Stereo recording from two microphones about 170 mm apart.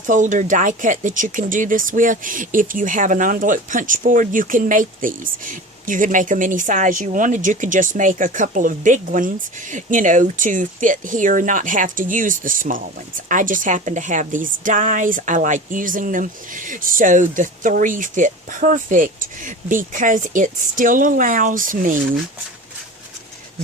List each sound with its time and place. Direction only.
0.1 s speech: 50° right (ahead or behind)